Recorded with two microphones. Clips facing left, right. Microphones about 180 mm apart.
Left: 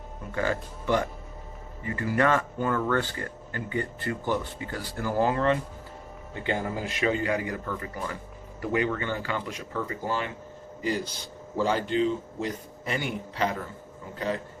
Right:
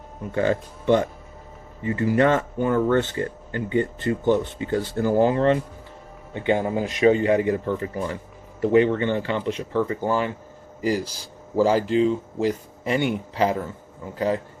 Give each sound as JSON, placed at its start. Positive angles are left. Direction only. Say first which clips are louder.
{"t": 0.3, "sound": "a man's voice", "louder": "right 6 dB", "side_deg": -25}